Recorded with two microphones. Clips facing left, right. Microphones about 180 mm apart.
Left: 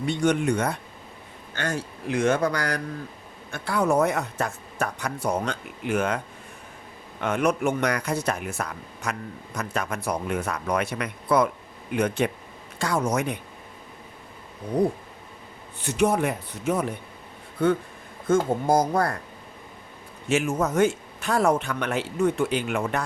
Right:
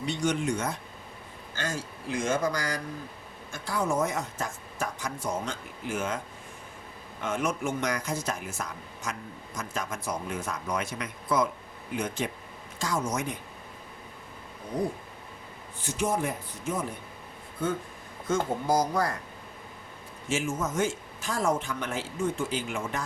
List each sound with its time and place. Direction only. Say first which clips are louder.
0.0 s a man's voice: left 5 dB; 55° left (ahead or behind)
7.2 s a man's voice: left 6 dB; 65° left (ahead or behind)
14.8 s a man's voice: left 7 dB; 65° left (ahead or behind)
18.3 s speech: left 6 dB; 50° left (ahead or behind)
20.2 s a man's voice: left 6 dB; 65° left (ahead or behind)